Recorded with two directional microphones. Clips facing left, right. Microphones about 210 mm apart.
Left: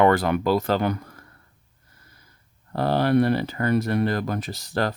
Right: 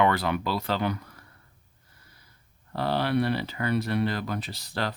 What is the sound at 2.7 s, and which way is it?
Speech, 45° left (ahead or behind).